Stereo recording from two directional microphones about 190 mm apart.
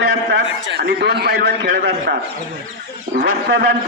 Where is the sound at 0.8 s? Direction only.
60° right (ahead or behind).